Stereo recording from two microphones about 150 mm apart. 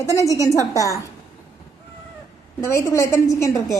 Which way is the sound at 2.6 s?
15° left (ahead or behind).